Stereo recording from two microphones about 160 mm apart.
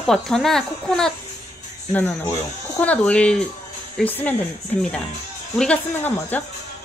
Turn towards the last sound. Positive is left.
turn(degrees=10)  # may be behind; listen again after turning